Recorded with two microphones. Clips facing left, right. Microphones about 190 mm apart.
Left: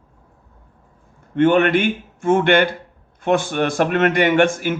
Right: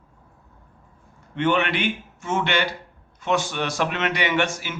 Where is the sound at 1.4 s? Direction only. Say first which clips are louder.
Left 8 dB; 50° left (ahead or behind).